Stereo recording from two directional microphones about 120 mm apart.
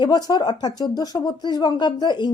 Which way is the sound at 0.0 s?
35° left (ahead or behind).